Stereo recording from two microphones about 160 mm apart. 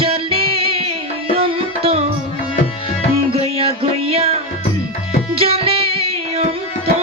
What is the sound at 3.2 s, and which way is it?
Music, 35° right (ahead or behind).